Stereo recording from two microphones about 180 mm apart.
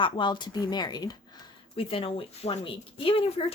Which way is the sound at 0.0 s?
25° left (ahead or behind).